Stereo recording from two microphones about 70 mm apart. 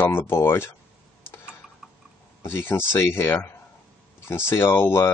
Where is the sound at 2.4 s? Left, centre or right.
Left.